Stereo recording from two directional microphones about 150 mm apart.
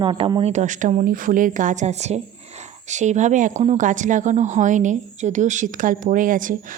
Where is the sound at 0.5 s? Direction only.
55° right (ahead or behind).